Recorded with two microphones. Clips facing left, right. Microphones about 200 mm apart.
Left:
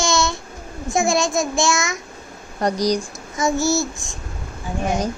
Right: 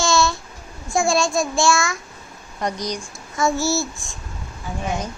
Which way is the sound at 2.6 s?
35° left (ahead or behind).